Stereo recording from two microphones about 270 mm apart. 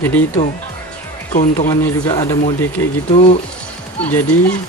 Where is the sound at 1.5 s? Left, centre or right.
Centre.